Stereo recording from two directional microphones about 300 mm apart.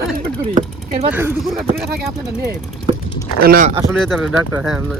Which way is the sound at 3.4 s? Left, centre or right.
Right.